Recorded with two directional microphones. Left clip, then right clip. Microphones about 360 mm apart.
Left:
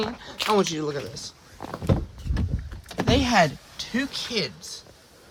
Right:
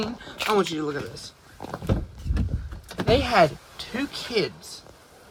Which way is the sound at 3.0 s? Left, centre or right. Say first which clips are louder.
Right 1 dB; centre.